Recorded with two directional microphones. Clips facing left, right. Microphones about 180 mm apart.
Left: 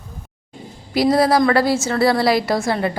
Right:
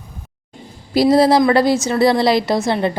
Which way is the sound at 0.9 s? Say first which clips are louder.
Right 3 dB; 30° right (ahead or behind).